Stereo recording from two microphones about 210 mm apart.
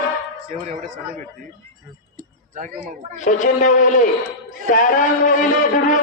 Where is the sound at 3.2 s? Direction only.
35° left (ahead or behind).